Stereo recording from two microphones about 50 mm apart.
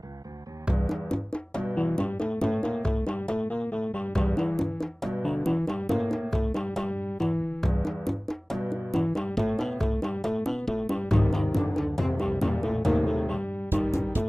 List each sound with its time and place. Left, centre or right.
2.0 s music: centre
4.1 s music: centre
8.9 s music: centre